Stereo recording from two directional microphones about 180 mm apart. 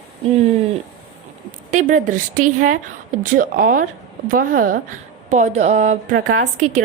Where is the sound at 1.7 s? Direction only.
45° right (ahead or behind).